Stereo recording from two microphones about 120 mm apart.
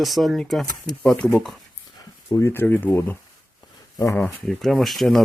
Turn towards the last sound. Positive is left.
turn(degrees=0)  # may be behind; listen again after turning